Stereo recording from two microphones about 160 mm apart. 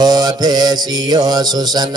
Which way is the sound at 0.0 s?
25° right (ahead or behind).